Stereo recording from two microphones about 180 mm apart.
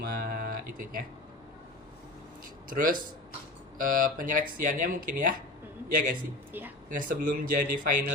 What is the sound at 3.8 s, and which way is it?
Speech, 50° right (ahead or behind).